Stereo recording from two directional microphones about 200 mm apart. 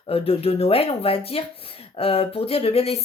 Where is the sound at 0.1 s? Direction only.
30° left (ahead or behind).